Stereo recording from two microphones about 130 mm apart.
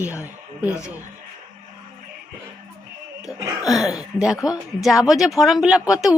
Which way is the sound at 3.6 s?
Centre (ahead or behind).